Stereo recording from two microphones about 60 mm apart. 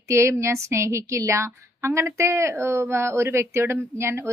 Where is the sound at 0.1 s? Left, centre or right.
Right.